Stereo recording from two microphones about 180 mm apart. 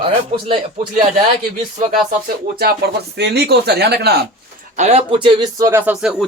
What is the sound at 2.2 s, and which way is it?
Speech, 60° right (ahead or behind).